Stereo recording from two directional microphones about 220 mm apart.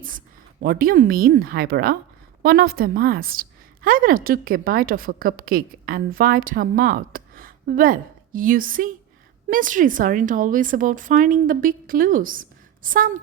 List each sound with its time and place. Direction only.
0.6 s a woman's voice: 40° right (ahead or behind)